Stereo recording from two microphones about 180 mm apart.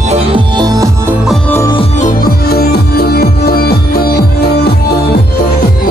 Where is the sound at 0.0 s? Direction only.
35° right (ahead or behind).